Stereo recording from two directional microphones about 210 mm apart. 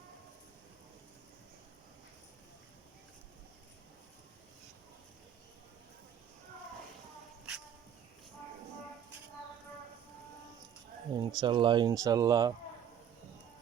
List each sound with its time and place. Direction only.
11.1 s speech: 20° right (ahead or behind)